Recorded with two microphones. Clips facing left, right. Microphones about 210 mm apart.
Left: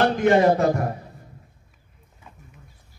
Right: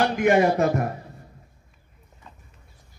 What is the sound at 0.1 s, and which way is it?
Speech, 15° right (ahead or behind).